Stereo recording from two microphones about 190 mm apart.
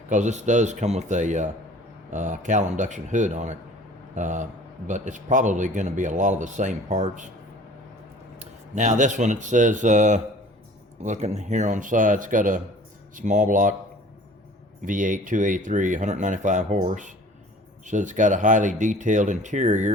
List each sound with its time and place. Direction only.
0.1 s speech: 40° right (ahead or behind)
8.4 s speech: 40° right (ahead or behind)
14.8 s speech: 45° right (ahead or behind)